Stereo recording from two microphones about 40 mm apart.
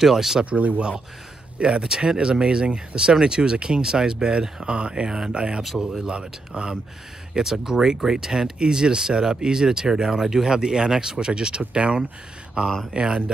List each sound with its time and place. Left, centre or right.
0.0 s speech: centre
0.5 s speech: right
1.6 s speech: centre
5.0 s speech: centre